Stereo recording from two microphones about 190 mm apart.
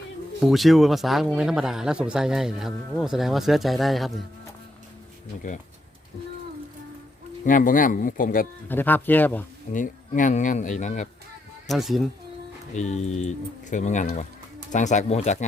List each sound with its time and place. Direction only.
0.4 s speech: centre (ahead or behind)
5.4 s speech: 40° left (ahead or behind)
7.4 s speech: 45° left (ahead or behind)
8.6 s speech: 10° left (ahead or behind)
9.7 s speech: 45° left (ahead or behind)
11.7 s speech: centre (ahead or behind)
12.7 s speech: 35° left (ahead or behind)